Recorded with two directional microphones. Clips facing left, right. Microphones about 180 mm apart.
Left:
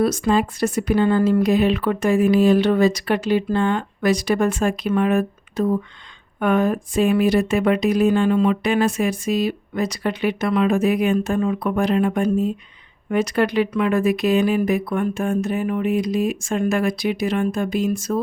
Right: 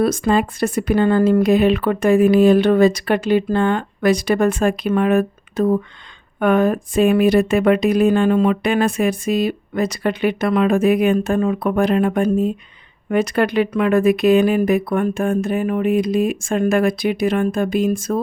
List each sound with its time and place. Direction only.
0.0 s speech: 55° right (ahead or behind)